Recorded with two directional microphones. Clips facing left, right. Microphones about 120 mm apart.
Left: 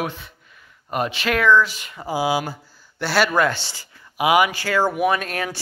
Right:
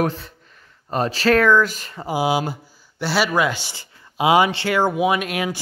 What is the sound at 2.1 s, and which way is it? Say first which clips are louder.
Speech: right 1 dB; 20° right (ahead or behind).